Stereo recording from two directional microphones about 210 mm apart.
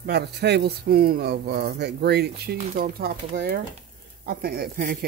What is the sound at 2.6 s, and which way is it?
Speech, 40° right (ahead or behind).